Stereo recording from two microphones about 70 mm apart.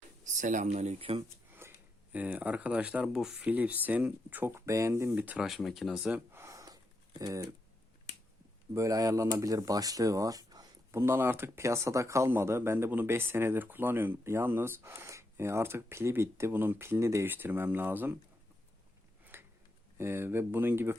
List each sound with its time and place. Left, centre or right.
1.6 s a sound: right
2.1 s speech: right
3.4 s speech: right
5.1 s speech: right
5.4 s speech: centre
6.3 s a sound: right
6.7 s a sound: right
8.7 s speech: right
10.9 s speech: right
17.2 s speech: right
19.2 s a sound: right
20.0 s speech: right